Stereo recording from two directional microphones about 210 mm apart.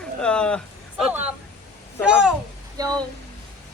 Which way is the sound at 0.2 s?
5° left (ahead or behind).